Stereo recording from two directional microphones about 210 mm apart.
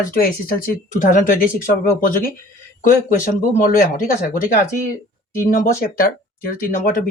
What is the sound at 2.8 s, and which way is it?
Speech, 40° left (ahead or behind).